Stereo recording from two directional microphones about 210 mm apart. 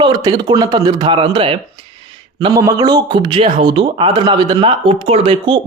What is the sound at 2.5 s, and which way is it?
Speech, 15° right (ahead or behind).